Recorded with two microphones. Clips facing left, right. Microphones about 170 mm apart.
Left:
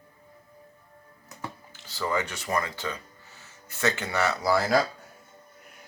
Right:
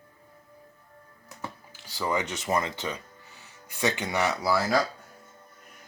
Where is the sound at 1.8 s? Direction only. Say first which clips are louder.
Even; 10° right (ahead or behind).